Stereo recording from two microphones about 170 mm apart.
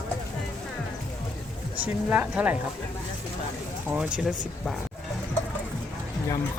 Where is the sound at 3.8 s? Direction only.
5° right (ahead or behind).